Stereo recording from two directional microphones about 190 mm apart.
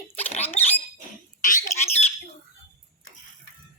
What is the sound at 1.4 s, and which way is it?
Squawk, 40° left (ahead or behind).